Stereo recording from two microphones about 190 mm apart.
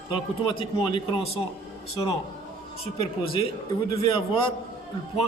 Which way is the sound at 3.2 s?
30° left (ahead or behind).